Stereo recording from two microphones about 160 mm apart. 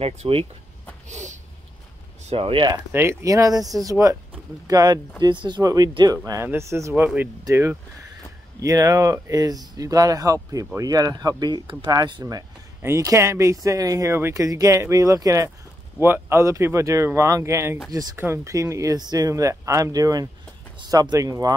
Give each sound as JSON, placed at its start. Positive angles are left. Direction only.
{"t": 0.0, "sound": "speech", "side_deg": -35}
{"t": 1.0, "sound": "a sound", "side_deg": -50}
{"t": 2.2, "sound": "speech", "side_deg": -35}
{"t": 2.9, "sound": "speech", "side_deg": -15}